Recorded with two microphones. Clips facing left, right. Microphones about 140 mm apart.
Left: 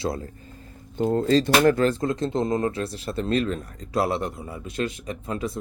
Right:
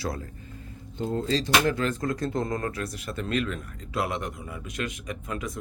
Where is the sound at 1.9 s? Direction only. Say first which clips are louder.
Left 4 dB; 25° left (ahead or behind).